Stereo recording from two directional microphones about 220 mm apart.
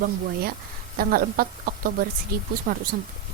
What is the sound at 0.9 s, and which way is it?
Speech, 40° right (ahead or behind).